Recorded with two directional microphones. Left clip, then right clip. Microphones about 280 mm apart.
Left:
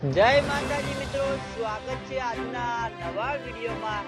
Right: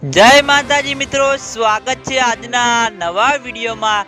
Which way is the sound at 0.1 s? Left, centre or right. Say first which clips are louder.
Right 13 dB; right.